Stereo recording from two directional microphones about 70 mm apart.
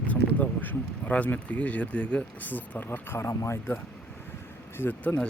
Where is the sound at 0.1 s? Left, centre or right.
Left.